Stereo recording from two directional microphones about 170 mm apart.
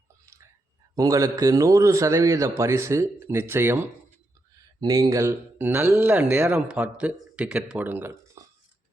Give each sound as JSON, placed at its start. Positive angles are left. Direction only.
{"t": 0.9, "sound": "speech", "side_deg": -20}